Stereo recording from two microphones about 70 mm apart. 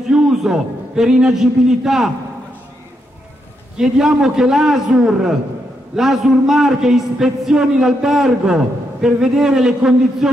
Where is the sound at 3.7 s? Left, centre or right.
Centre.